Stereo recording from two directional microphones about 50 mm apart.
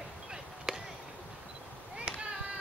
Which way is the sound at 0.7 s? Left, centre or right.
Centre.